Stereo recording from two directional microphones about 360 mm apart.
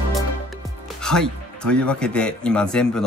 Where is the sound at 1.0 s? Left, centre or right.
Centre.